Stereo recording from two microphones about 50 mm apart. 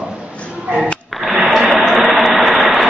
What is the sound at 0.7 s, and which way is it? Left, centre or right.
Speech, right.